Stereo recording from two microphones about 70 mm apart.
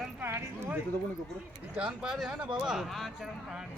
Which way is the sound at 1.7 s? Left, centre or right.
Centre.